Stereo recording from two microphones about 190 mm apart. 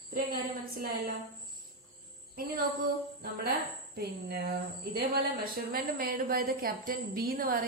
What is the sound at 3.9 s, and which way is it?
A woman's voice, 55° right (ahead or behind).